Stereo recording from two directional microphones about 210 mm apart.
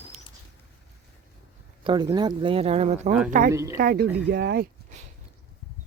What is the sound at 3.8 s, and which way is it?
Speech, 45° right (ahead or behind).